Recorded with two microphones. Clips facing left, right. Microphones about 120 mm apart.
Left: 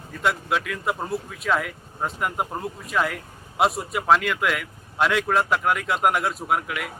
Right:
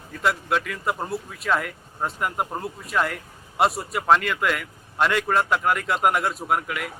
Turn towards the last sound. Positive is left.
turn(degrees=0)  # may be behind; listen again after turning